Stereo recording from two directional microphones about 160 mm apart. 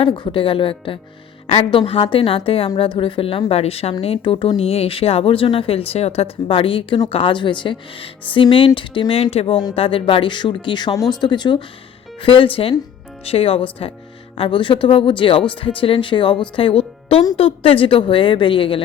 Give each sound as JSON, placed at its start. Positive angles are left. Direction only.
{"t": 0.0, "sound": "speech", "side_deg": 30}